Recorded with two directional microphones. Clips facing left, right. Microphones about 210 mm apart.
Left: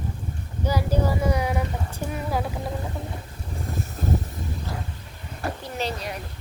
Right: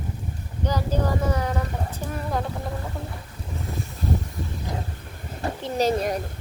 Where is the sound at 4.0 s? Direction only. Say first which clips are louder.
Even; 50° left (ahead or behind).